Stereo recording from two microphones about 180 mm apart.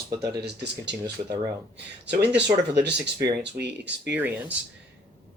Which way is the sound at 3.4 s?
70° right (ahead or behind).